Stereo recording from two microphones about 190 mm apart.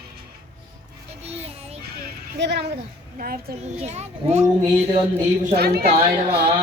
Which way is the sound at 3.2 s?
50° right (ahead or behind).